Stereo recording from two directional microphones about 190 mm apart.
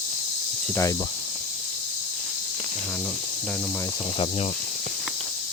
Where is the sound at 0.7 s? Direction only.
15° left (ahead or behind).